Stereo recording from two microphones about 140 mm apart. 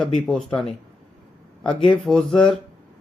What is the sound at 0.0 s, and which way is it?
Speech, 5° left (ahead or behind).